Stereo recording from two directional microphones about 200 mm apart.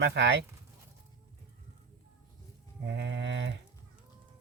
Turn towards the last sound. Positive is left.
turn(degrees=-65)  # may be behind; listen again after turning